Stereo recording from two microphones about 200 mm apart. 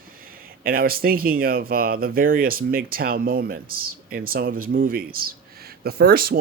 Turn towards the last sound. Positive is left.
turn(degrees=-50)  # may be behind; listen again after turning